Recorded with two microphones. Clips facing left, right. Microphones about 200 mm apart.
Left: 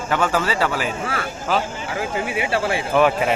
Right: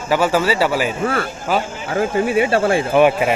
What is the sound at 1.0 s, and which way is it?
Speech, 50° right (ahead or behind).